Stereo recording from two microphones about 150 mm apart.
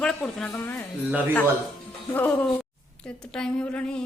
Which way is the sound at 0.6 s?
15° left (ahead or behind).